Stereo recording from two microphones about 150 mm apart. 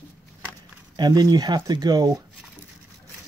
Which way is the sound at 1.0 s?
25° right (ahead or behind).